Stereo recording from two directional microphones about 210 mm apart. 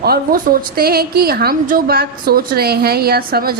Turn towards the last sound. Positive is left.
turn(degrees=-45)  # may be behind; listen again after turning